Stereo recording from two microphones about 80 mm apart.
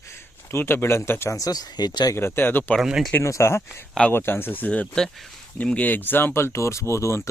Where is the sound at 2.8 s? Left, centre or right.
Centre.